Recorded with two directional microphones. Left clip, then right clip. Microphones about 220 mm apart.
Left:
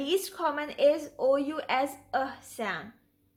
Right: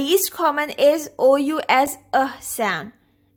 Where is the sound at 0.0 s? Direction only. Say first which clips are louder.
Right 10 dB; 45° right (ahead or behind).